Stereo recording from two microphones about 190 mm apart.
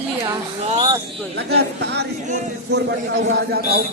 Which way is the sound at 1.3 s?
60° right (ahead or behind).